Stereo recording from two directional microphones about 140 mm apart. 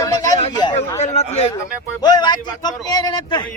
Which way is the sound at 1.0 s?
55° left (ahead or behind).